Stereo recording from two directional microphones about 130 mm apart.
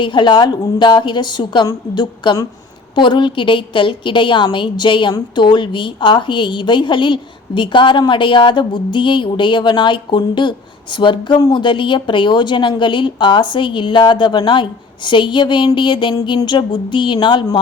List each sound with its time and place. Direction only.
0.0 s a woman's voice: 35° left (ahead or behind)